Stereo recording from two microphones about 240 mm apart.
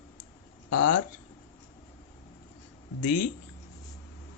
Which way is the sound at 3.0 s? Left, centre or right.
Left.